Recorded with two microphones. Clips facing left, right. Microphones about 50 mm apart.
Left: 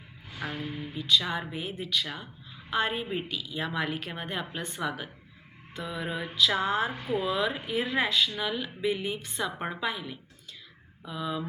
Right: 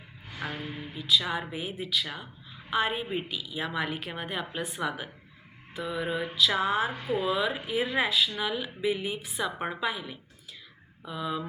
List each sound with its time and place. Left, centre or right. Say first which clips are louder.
0.8 s speech: even; centre